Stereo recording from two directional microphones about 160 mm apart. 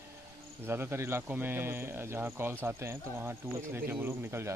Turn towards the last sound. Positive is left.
turn(degrees=-15)  # may be behind; listen again after turning